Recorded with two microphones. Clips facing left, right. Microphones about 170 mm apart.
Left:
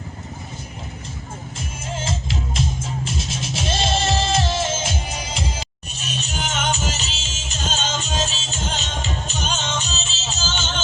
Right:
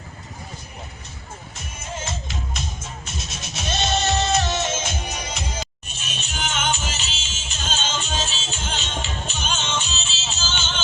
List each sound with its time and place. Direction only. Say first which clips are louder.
1.5 s music: left 3 dB; 30° left (ahead or behind)